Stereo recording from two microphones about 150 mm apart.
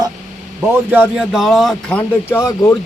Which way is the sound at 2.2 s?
20° left (ahead or behind).